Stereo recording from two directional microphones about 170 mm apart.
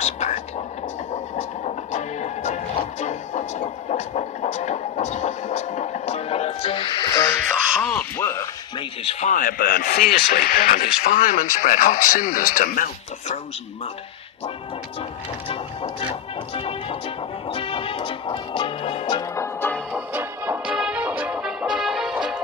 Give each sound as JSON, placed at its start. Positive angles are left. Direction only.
{"t": 0.0, "sound": "whispering", "side_deg": 40}
{"t": 1.1, "sound": "music", "side_deg": 40}
{"t": 7.8, "sound": "a sound", "side_deg": 10}
{"t": 8.7, "sound": "a sound", "side_deg": 35}
{"t": 9.3, "sound": "speech", "side_deg": 55}
{"t": 15.4, "sound": "music", "side_deg": 30}
{"t": 19.9, "sound": "music", "side_deg": -10}